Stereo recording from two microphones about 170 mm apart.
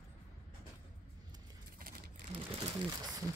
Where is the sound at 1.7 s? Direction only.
60° right (ahead or behind).